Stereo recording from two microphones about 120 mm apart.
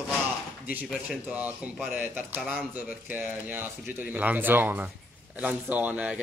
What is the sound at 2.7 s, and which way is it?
Speech, 15° right (ahead or behind).